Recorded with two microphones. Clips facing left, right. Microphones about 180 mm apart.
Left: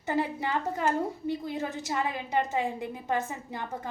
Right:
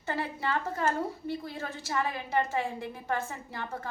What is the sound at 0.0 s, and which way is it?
A woman's voice, 15° left (ahead or behind).